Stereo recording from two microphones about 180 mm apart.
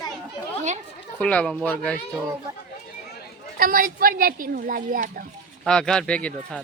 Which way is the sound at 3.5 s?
50° right (ahead or behind).